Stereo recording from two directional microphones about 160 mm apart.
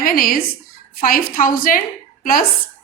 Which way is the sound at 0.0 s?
60° left (ahead or behind).